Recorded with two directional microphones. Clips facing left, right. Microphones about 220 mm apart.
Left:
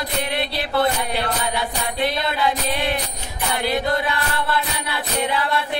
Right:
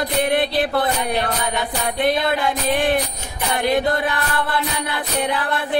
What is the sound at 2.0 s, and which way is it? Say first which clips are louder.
Music: right 3 dB; 50° right (ahead or behind).